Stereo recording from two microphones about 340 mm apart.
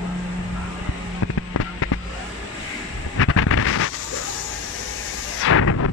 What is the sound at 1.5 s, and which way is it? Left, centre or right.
Fireworks, left.